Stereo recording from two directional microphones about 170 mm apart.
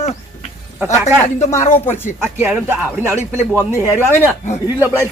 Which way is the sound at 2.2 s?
10° right (ahead or behind).